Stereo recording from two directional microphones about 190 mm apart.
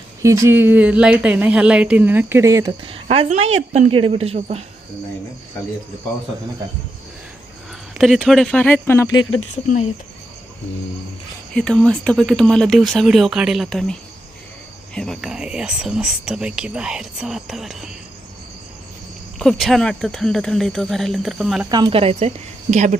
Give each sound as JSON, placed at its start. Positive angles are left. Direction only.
{"t": 0.2, "sound": "speech", "side_deg": -15}
{"t": 2.8, "sound": "speech", "side_deg": -30}
{"t": 7.9, "sound": "speech", "side_deg": 0}
{"t": 9.6, "sound": "speech", "side_deg": 40}
{"t": 11.5, "sound": "speech", "side_deg": 5}
{"t": 14.9, "sound": "speech", "side_deg": 5}
{"t": 19.4, "sound": "speech", "side_deg": 0}
{"t": 21.7, "sound": "speech", "side_deg": -25}